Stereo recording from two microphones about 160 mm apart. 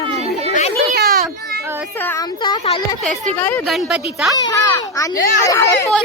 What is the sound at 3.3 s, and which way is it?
Speech, 10° left (ahead or behind).